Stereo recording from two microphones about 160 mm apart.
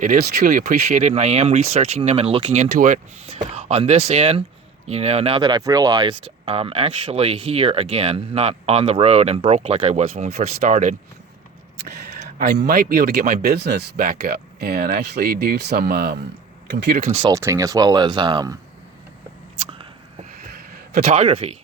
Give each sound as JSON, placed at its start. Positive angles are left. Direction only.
{"t": 0.0, "sound": "speech", "side_deg": -65}
{"t": 2.7, "sound": "speech", "side_deg": -55}
{"t": 3.2, "sound": "speech", "side_deg": -40}
{"t": 12.2, "sound": "speech", "side_deg": -80}
{"t": 16.7, "sound": "speech", "side_deg": -90}
{"t": 17.2, "sound": "speech", "side_deg": -20}
{"t": 21.0, "sound": "speech", "side_deg": -45}